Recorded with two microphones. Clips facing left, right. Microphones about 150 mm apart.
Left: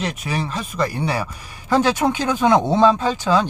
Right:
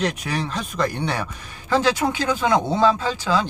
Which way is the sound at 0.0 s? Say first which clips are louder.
Even; centre (ahead or behind).